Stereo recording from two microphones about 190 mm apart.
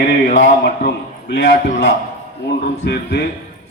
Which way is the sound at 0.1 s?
65° left (ahead or behind).